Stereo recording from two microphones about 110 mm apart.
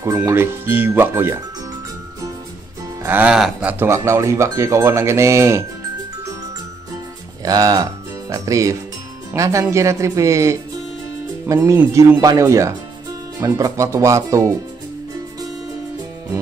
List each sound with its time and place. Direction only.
0.2 s speech: 20° right (ahead or behind)
3.0 s music: 15° right (ahead or behind)
3.6 s speech: 25° right (ahead or behind)
7.4 s speech: 35° right (ahead or behind)